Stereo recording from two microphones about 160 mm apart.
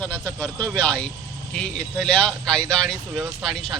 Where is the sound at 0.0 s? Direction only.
10° left (ahead or behind).